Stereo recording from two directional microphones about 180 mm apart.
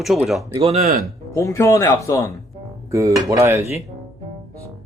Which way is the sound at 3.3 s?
15° right (ahead or behind).